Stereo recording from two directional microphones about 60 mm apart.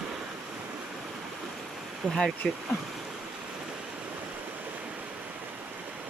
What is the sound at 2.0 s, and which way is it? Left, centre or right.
Speech, centre.